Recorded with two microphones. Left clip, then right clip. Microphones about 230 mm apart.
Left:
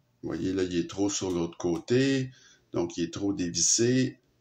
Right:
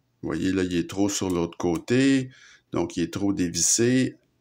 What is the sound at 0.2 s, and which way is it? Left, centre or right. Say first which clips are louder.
Speech: right 4 dB; right.